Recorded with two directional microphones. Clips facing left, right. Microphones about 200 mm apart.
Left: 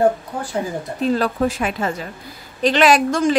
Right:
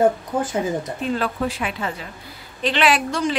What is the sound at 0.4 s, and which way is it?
Speech, 20° right (ahead or behind).